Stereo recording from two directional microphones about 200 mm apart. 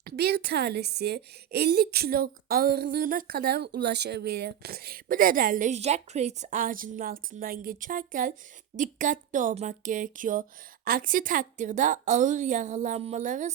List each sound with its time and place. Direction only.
0.0 s a woman's voice: 50° right (ahead or behind)